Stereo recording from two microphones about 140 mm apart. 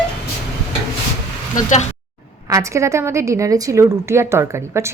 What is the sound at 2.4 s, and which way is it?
A woman's voice, 20° right (ahead or behind).